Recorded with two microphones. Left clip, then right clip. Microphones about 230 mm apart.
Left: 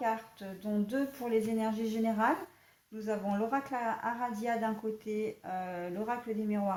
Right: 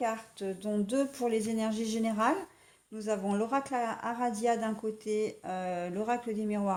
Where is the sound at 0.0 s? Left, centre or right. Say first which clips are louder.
Right 1 dB; right.